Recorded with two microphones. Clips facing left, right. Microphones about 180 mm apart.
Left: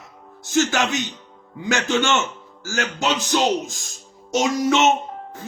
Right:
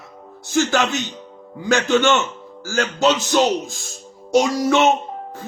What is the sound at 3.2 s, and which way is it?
A man's voice, 15° left (ahead or behind).